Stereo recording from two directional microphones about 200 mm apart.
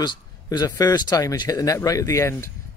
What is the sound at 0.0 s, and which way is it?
Speech, 20° left (ahead or behind).